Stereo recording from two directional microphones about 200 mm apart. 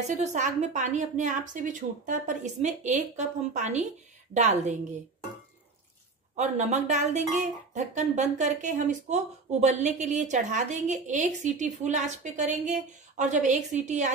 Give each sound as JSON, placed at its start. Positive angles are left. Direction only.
{"t": 0.2, "sound": "speech", "side_deg": -35}
{"t": 6.3, "sound": "speech", "side_deg": -35}